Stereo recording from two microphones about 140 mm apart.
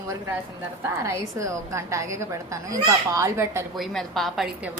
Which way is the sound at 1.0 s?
20° right (ahead or behind).